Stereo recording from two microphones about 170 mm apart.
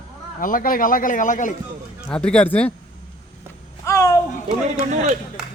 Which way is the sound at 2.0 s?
5° left (ahead or behind).